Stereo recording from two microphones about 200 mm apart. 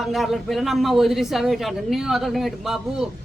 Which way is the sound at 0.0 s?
Centre (ahead or behind).